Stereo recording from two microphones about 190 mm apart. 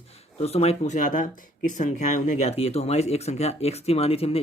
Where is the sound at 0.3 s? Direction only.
35° left (ahead or behind).